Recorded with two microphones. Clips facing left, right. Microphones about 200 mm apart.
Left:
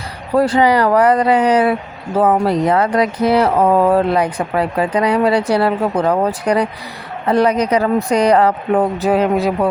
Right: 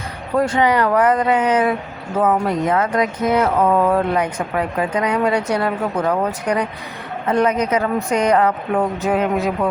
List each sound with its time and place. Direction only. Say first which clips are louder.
0.3 s speech: left 4 dB; 35° left (ahead or behind)